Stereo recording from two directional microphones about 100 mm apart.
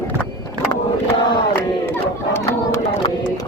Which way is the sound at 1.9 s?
25° left (ahead or behind).